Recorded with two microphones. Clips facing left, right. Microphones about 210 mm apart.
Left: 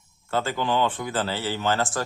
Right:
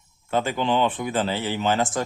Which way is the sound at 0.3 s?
20° right (ahead or behind).